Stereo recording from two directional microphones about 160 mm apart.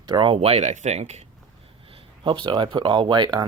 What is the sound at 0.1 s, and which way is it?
Speech, 30° right (ahead or behind).